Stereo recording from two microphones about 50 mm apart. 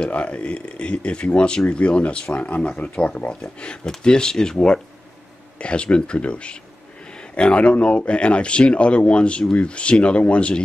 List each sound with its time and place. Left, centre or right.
0.0 s speech: left